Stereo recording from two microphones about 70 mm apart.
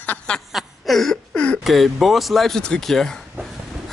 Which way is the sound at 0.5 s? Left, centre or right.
Centre.